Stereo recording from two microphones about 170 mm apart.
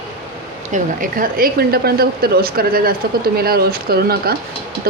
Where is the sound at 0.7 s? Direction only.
50° right (ahead or behind).